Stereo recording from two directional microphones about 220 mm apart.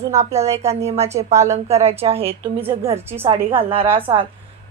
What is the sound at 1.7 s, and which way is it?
Speech, 30° right (ahead or behind).